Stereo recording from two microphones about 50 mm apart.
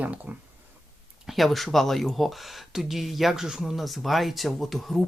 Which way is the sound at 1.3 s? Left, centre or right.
Centre.